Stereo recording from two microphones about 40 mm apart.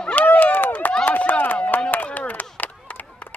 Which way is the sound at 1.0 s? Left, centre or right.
Left.